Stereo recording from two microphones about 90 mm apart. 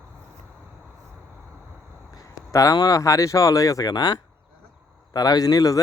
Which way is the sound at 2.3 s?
40° left (ahead or behind).